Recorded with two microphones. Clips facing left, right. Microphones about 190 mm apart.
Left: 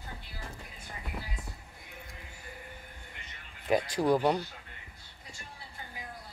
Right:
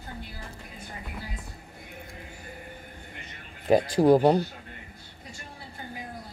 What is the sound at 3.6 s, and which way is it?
Speech, 30° right (ahead or behind).